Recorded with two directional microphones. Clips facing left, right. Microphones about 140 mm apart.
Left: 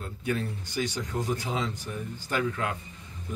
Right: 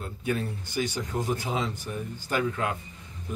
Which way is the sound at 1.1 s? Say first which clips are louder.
Right 1 dB; 15° right (ahead or behind).